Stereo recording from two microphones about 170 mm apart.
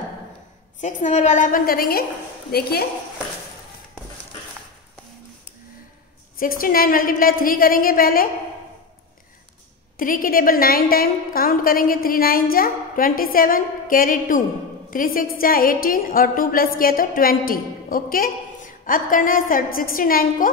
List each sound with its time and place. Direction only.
0.7 s a woman's voice: 45° left (ahead or behind); by 2.7 s 65° left (ahead or behind)
6.4 s a woman's voice: 55° left (ahead or behind)
9.9 s a woman's voice: 55° left (ahead or behind)